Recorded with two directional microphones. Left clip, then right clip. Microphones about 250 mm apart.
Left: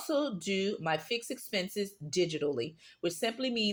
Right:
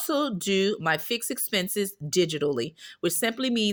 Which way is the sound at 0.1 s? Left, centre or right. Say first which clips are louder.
Right 6 dB; right.